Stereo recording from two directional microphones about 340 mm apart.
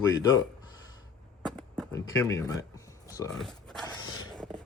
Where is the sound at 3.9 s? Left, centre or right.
Centre.